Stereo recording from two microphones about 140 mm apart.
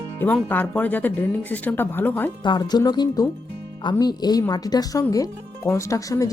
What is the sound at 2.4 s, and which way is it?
Speech, 30° left (ahead or behind).